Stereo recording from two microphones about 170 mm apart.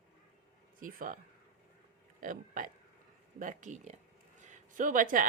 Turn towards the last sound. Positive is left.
turn(degrees=-50)  # may be behind; listen again after turning